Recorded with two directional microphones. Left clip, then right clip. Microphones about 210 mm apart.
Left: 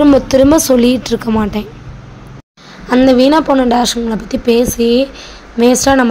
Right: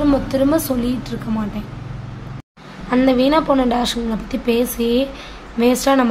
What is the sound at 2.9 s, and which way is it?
A woman's voice, 30° left (ahead or behind).